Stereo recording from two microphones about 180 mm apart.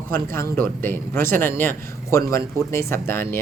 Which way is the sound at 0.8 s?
10° left (ahead or behind).